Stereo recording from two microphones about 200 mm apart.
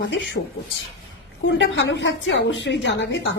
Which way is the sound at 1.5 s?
60° left (ahead or behind).